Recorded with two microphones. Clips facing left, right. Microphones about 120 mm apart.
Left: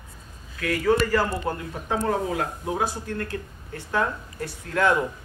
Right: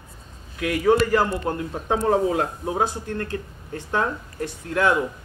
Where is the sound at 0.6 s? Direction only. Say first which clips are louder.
Right 3 dB; 20° right (ahead or behind).